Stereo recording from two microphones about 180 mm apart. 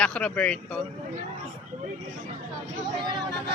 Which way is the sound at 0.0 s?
5° left (ahead or behind).